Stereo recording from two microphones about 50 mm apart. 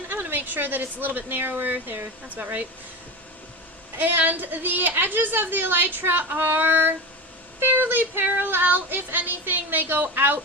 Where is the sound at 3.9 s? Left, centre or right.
Right.